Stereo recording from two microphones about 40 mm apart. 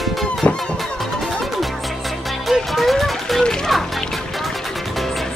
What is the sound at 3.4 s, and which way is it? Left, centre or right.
Music, centre.